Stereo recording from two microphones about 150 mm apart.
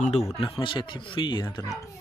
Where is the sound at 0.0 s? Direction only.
45° left (ahead or behind).